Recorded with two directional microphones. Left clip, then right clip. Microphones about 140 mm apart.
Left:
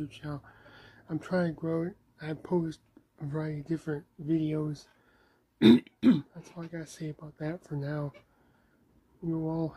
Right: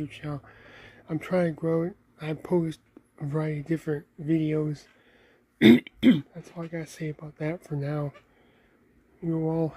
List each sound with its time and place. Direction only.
0.0 s speech: 15° right (ahead or behind)
9.3 s speech: 15° right (ahead or behind)